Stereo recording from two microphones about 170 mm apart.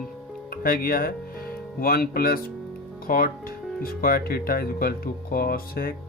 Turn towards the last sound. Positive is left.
turn(degrees=60)  # may be behind; listen again after turning